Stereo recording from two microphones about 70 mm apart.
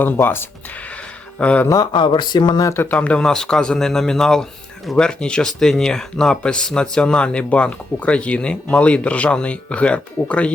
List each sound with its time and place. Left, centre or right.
0.0 s speech: left
1.4 s speech: centre
1.8 s speech: left
2.9 s speech: centre